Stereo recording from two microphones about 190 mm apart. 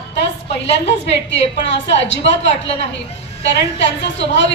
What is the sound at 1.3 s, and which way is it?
A woman's voice, 70° left (ahead or behind).